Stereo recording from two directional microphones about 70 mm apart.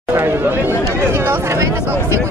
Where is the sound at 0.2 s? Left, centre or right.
Right.